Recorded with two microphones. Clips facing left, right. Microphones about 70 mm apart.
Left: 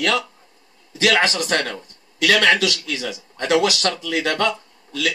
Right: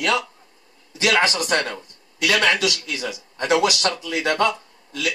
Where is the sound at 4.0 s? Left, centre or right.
Left.